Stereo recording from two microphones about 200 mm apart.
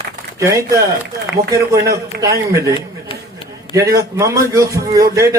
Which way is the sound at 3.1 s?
25° left (ahead or behind).